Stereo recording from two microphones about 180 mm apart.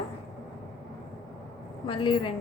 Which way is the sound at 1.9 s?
30° left (ahead or behind).